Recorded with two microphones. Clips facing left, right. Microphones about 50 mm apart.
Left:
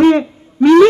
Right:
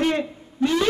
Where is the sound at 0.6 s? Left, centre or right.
Left.